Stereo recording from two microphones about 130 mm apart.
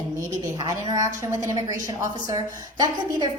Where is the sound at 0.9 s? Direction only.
25° right (ahead or behind).